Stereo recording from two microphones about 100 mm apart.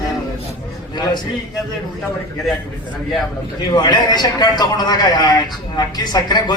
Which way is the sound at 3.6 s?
45° left (ahead or behind).